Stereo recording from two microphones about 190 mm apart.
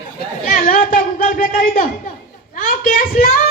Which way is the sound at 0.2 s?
45° left (ahead or behind).